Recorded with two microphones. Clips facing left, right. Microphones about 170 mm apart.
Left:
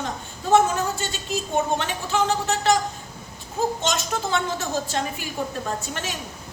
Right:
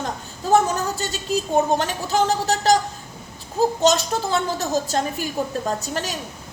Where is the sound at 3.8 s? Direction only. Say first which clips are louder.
Right 7 dB; 40° right (ahead or behind).